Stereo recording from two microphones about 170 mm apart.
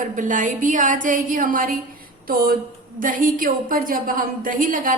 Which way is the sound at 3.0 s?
50° right (ahead or behind).